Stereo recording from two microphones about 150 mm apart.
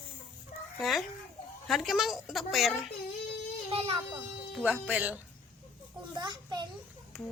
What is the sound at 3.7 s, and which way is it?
Speech, 40° right (ahead or behind).